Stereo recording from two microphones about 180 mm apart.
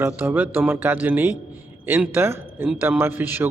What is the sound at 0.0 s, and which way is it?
Speech, 10° right (ahead or behind).